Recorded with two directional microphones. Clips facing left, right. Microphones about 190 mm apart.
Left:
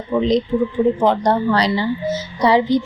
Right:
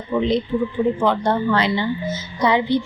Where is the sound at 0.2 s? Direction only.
40° left (ahead or behind).